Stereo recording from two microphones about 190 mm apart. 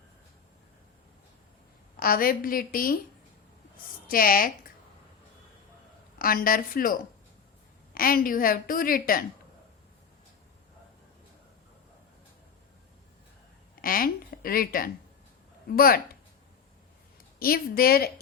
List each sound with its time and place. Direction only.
2.0 s a woman's voice: 50° left (ahead or behind)
4.1 s a woman's voice: 50° left (ahead or behind)
6.1 s a woman's voice: 50° left (ahead or behind)
13.8 s a woman's voice: 50° left (ahead or behind)
17.4 s a woman's voice: 50° left (ahead or behind)